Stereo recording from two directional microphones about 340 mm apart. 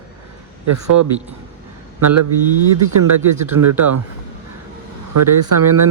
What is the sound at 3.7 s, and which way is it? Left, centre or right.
Speech, right.